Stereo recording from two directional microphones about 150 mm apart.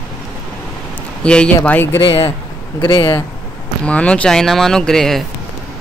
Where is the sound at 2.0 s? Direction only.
35° left (ahead or behind).